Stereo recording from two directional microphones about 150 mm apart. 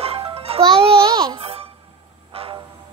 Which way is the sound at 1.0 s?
25° right (ahead or behind).